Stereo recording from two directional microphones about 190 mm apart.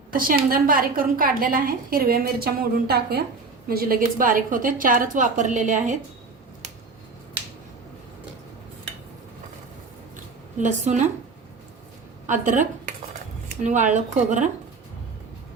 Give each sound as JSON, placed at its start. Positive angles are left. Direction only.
{"t": 0.1, "sound": "a woman's voice", "side_deg": -45}
{"t": 10.6, "sound": "speech", "side_deg": -40}
{"t": 12.2, "sound": "a woman's voice", "side_deg": -40}